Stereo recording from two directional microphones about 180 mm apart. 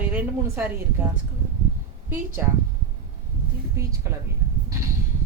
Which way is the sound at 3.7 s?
15° right (ahead or behind).